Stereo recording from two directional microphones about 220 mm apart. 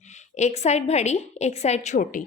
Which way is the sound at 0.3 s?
30° left (ahead or behind).